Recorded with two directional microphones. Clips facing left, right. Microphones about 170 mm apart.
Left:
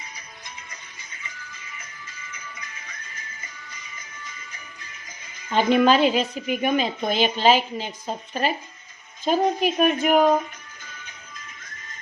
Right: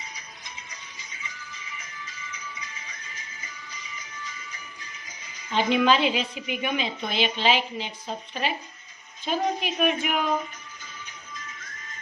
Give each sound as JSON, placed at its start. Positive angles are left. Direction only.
{"t": 5.5, "sound": "a woman's voice", "side_deg": 45}